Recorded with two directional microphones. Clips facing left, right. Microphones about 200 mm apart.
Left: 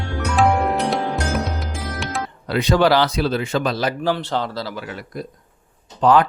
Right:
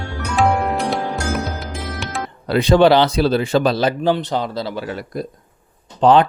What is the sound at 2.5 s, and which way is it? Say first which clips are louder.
Speech: right 4 dB; 30° right (ahead or behind).